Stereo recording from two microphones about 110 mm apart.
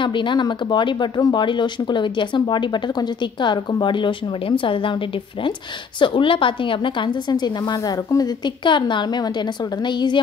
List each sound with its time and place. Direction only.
0.0 s speech: 45° left (ahead or behind)
5.9 s speech: 50° left (ahead or behind)